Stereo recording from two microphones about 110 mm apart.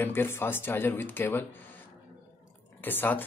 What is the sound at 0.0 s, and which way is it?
Speech, 20° left (ahead or behind).